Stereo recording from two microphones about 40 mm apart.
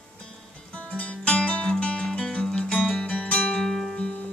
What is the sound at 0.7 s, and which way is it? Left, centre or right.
Music, left.